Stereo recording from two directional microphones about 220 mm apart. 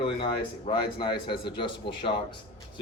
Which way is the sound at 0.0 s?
25° left (ahead or behind).